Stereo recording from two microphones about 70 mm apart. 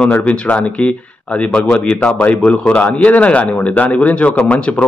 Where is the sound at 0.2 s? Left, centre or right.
Centre.